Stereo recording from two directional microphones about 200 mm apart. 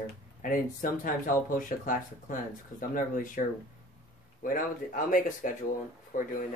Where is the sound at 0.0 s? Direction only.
45° left (ahead or behind).